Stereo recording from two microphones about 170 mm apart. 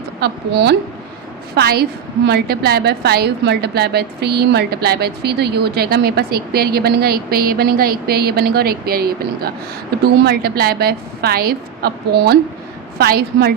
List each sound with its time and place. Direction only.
0.2 s a woman's voice: 75° right (ahead or behind)